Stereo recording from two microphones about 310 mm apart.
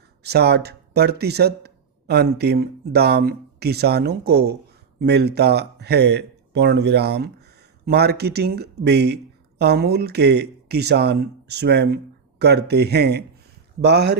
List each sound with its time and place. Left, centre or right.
0.2 s speech: right